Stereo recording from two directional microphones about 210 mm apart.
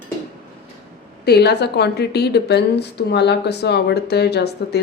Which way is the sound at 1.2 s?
50° left (ahead or behind).